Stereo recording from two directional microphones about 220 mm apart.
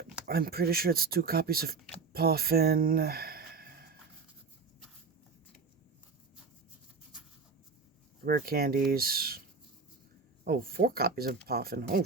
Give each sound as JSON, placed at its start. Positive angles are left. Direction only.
{"t": 0.3, "sound": "speech", "side_deg": -45}
{"t": 8.2, "sound": "speech", "side_deg": -45}
{"t": 10.4, "sound": "speech", "side_deg": -45}